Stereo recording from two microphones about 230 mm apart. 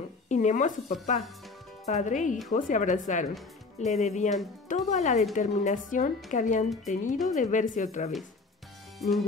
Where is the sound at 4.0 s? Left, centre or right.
Left.